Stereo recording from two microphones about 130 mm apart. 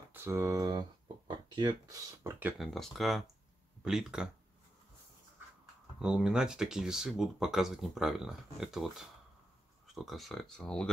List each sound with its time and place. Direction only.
0.1 s speech: 20° right (ahead or behind)
2.6 s speech: centre (ahead or behind)
5.9 s speech: 5° right (ahead or behind)